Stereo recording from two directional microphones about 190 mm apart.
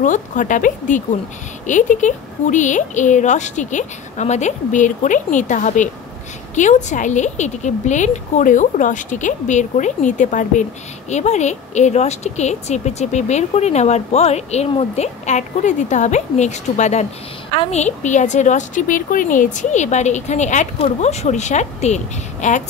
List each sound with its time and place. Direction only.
0.0 s speech: 40° left (ahead or behind)